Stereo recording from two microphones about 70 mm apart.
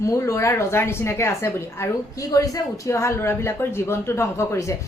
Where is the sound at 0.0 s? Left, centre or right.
Left.